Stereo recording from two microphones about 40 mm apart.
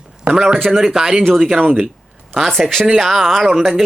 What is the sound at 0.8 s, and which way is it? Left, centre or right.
Speech, centre.